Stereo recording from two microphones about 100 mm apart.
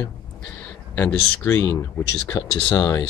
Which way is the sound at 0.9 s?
25° left (ahead or behind).